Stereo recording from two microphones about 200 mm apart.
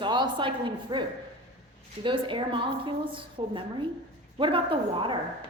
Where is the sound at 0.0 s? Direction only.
25° right (ahead or behind).